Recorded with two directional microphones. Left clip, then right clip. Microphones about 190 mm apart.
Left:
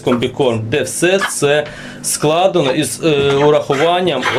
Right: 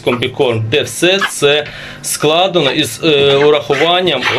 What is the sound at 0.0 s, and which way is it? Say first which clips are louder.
Speech: right 1 dB; 5° left (ahead or behind).